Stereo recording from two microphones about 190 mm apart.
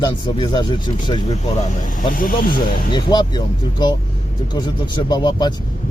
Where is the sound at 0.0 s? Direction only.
25° left (ahead or behind).